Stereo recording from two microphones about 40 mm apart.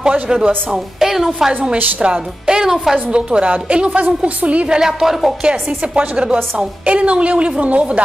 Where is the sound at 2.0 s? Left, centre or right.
Centre.